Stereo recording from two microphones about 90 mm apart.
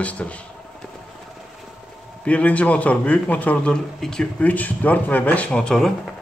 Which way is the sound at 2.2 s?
15° left (ahead or behind).